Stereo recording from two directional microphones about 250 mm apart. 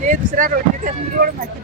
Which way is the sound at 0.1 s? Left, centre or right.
Right.